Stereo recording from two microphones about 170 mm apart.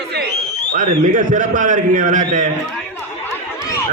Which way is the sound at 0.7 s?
50° right (ahead or behind).